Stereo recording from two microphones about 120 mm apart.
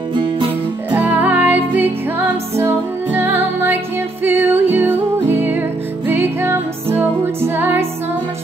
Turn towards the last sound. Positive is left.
turn(degrees=-20)  # may be behind; listen again after turning